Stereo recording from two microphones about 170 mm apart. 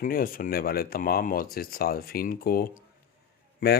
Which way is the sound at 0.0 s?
55° left (ahead or behind).